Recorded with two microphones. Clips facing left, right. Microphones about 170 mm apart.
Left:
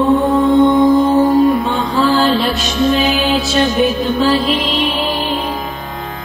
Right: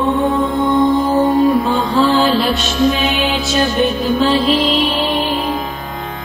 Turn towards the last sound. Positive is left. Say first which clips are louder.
# even
turn(degrees=0)  # may be behind; listen again after turning